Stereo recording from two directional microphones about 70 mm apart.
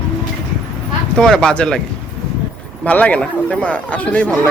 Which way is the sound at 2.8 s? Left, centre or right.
Left.